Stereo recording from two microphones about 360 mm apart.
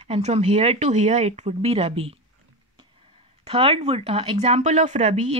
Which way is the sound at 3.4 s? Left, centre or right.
Centre.